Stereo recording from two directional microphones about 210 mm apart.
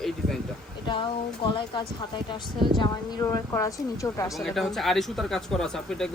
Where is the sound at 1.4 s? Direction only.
20° left (ahead or behind).